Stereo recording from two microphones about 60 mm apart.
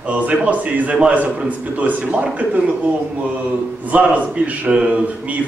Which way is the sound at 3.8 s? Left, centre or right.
Right.